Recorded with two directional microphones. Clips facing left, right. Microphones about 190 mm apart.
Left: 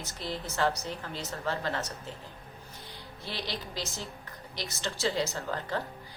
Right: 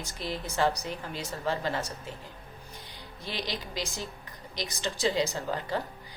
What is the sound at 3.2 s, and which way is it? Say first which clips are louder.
A woman's voice: right 2 dB; 15° right (ahead or behind).